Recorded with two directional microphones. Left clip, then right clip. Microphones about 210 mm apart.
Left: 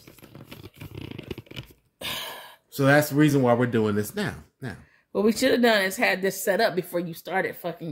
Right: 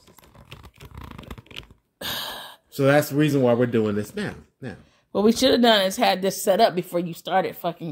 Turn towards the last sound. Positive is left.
turn(degrees=-30)  # may be behind; listen again after turning